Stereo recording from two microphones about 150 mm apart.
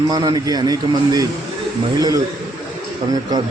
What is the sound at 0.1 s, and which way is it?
Speech, 25° right (ahead or behind).